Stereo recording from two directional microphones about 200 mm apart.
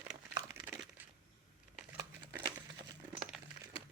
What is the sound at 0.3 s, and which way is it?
Crumpling, 10° right (ahead or behind).